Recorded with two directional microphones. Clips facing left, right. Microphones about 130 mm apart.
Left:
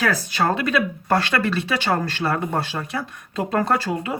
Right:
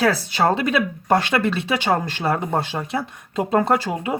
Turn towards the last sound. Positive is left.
turn(degrees=-20)  # may be behind; listen again after turning